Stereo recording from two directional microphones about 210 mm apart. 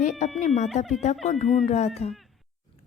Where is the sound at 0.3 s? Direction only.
35° left (ahead or behind).